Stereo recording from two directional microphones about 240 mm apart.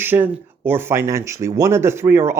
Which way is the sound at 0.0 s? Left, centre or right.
Centre.